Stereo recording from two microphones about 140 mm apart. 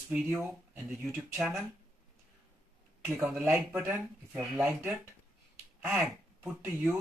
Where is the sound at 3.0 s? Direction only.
15° right (ahead or behind).